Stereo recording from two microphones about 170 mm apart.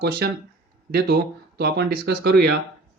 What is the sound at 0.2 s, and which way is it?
Speech, 70° right (ahead or behind).